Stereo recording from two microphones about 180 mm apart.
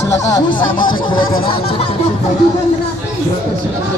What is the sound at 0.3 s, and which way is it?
Speech, 25° left (ahead or behind).